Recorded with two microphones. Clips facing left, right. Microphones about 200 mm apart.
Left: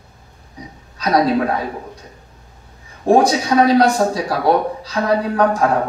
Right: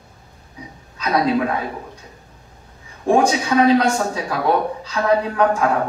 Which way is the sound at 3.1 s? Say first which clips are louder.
Left 3 dB; 35° left (ahead or behind).